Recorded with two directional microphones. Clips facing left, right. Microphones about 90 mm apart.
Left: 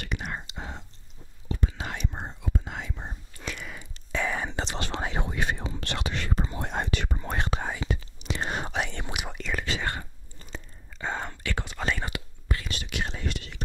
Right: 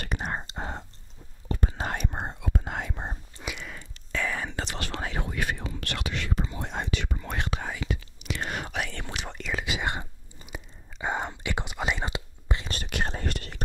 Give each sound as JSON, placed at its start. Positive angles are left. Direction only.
{"t": 0.0, "sound": "whispering", "side_deg": -40}
{"t": 4.1, "sound": "whispering", "side_deg": 20}
{"t": 6.6, "sound": "whispering", "side_deg": 50}
{"t": 7.1, "sound": "whispering", "side_deg": 35}
{"t": 9.4, "sound": "whispering", "side_deg": -5}
{"t": 9.8, "sound": "whispering", "side_deg": -15}
{"t": 12.6, "sound": "whispering", "side_deg": -45}